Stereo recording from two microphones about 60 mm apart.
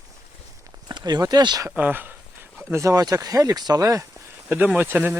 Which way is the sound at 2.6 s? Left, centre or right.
Right.